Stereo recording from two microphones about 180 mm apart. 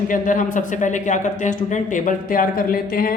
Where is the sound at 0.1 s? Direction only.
45° left (ahead or behind).